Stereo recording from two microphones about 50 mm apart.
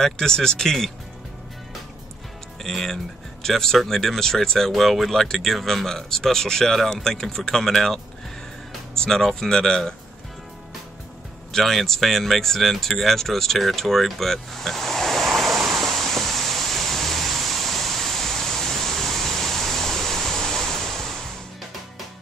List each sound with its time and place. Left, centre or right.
0.0 s speech: centre
2.6 s speech: centre
11.5 s speech: centre
15.3 s a sound: centre